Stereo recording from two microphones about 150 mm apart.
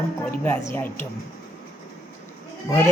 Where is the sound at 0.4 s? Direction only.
15° left (ahead or behind).